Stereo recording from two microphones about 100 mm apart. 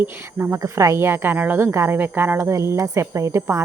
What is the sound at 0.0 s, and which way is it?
Speech, 20° right (ahead or behind).